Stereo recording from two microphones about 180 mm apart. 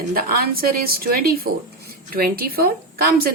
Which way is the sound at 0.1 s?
55° right (ahead or behind).